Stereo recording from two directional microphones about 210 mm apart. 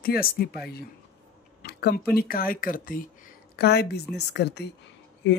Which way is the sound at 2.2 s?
45° left (ahead or behind).